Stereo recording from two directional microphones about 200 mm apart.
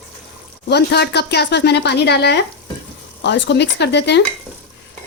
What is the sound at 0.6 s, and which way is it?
A woman's voice, 55° left (ahead or behind).